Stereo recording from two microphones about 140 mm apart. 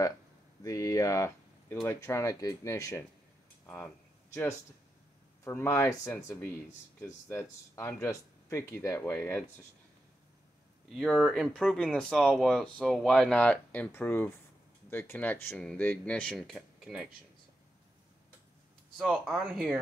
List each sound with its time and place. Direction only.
0.7 s speech: 25° left (ahead or behind)
3.6 s a sound: 10° left (ahead or behind)
5.4 s speech: 15° left (ahead or behind)
7.2 s speech: 15° left (ahead or behind)
10.9 s speech: 5° left (ahead or behind)
18.9 s speech: centre (ahead or behind)